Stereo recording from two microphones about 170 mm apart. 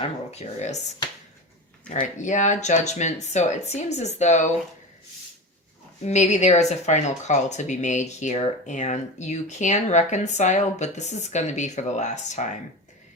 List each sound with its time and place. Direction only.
0.3 s speech: 40° left (ahead or behind)
1.9 s speech: 45° left (ahead or behind)
6.1 s speech: 45° left (ahead or behind)